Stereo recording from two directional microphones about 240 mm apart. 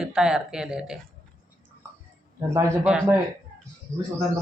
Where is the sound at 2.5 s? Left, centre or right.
Centre.